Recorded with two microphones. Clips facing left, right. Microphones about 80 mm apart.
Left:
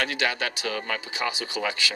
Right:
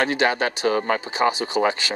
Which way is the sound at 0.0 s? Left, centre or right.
Right.